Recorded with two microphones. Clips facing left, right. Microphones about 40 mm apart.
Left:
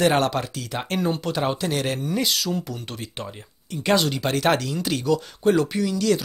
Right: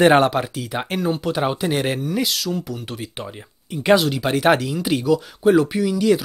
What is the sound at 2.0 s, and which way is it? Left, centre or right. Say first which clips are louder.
Speech: right 2 dB; centre.